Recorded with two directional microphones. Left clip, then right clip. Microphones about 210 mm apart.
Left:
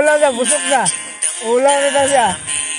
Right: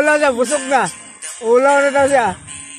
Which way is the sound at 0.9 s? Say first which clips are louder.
Left 8 dB; 45° left (ahead or behind).